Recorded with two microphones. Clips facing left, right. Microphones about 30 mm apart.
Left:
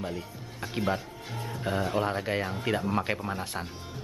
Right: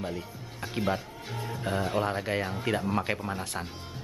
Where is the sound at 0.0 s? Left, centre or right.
Centre.